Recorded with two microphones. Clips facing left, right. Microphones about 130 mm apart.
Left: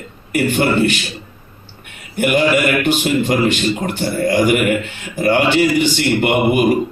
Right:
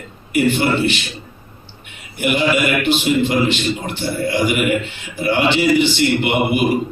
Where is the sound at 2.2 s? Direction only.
45° left (ahead or behind).